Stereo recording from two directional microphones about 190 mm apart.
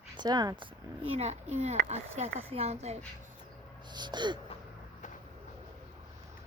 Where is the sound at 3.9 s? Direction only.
25° right (ahead or behind).